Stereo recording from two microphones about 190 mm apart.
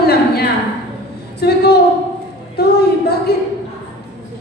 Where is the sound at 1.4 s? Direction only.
55° left (ahead or behind).